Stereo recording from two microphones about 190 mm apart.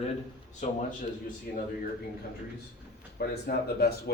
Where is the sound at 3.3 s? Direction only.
55° left (ahead or behind).